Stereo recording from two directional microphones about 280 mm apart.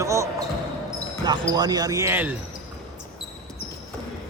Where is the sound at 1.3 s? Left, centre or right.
Centre.